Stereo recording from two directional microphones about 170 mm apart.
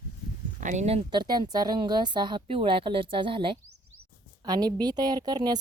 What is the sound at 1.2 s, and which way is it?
A woman's voice, 25° right (ahead or behind).